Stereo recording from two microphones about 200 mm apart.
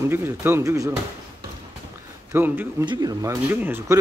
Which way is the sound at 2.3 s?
10° right (ahead or behind).